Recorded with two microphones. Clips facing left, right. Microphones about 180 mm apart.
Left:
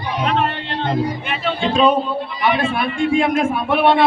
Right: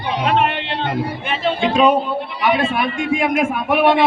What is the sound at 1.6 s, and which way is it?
Speech, 15° right (ahead or behind).